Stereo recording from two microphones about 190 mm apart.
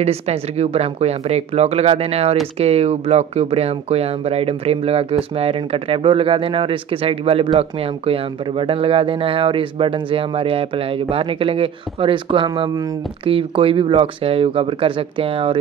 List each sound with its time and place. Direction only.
0.0 s speech: 35° right (ahead or behind)